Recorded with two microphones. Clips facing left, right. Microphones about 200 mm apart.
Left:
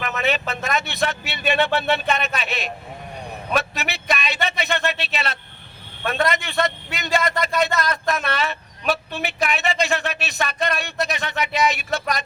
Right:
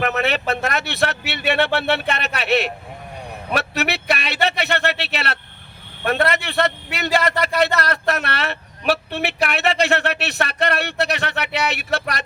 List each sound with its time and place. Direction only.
0.0 s a man's voice: 65° right (ahead or behind)